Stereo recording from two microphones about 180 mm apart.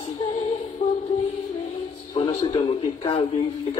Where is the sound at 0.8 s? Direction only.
40° left (ahead or behind).